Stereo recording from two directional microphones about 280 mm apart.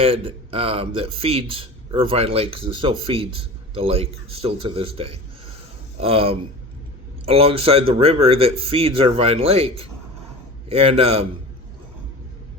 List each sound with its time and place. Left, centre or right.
0.0 s speech: centre